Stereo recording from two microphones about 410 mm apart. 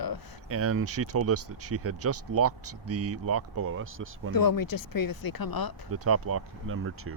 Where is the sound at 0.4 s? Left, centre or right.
Right.